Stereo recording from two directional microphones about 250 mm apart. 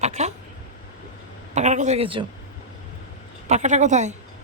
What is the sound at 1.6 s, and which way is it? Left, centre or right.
Speech, right.